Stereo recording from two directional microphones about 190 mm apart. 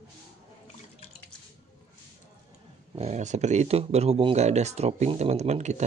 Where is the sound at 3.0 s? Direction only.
35° right (ahead or behind).